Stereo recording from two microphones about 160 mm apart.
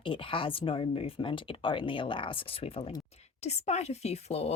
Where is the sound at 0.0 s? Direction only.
30° left (ahead or behind).